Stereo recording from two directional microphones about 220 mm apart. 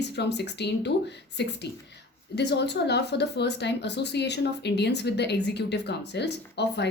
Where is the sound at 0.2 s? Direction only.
50° left (ahead or behind).